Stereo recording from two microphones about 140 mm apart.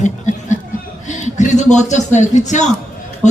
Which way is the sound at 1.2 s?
60° left (ahead or behind).